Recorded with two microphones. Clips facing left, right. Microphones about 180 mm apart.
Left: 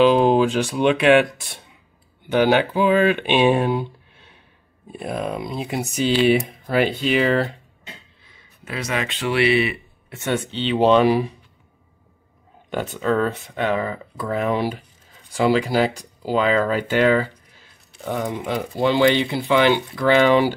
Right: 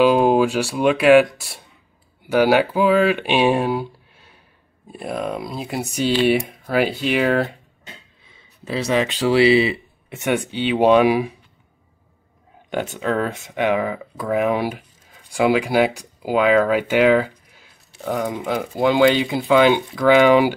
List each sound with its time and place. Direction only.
0.0 s speech: 5° right (ahead or behind)
8.6 s speech: 30° right (ahead or behind); by 11.3 s 10° right (ahead or behind)
13.2 s speech: 15° right (ahead or behind)